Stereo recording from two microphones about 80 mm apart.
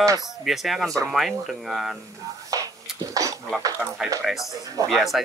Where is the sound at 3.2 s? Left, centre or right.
Right.